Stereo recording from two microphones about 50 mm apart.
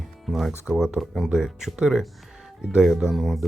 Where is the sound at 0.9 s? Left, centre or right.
Centre.